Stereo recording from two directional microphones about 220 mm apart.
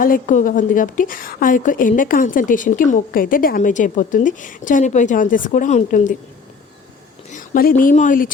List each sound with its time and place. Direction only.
0.0 s a woman's voice: 35° left (ahead or behind)
7.3 s a sound: 40° left (ahead or behind)
7.8 s a woman's voice: 35° left (ahead or behind)